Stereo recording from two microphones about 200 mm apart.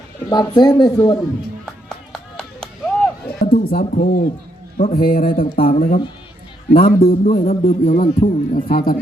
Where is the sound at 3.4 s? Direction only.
40° left (ahead or behind).